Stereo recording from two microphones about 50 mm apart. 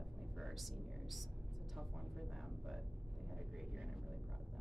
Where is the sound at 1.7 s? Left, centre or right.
Centre.